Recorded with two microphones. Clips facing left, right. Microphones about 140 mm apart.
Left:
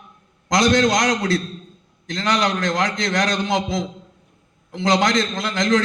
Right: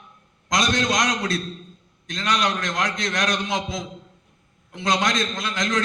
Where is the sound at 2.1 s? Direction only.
75° left (ahead or behind).